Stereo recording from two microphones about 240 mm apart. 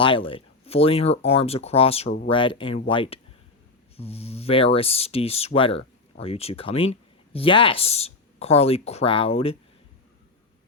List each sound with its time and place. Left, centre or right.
0.0 s speech: left